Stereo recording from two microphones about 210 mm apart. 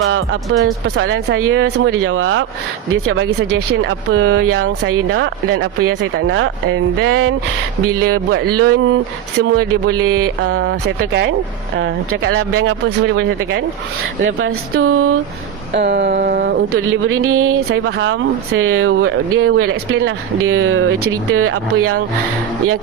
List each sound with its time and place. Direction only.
0.6 s speech: 70° right (ahead or behind)
4.1 s speech: 90° right
5.1 s speech: 65° right (ahead or behind)
8.5 s speech: 90° right
10.5 s a sound: 55° right (ahead or behind)
11.8 s speech: 65° right (ahead or behind); by 15.2 s 90° right
15.7 s a sound: 55° right (ahead or behind)
16.7 s speech: 75° right (ahead or behind); by 22.0 s 90° right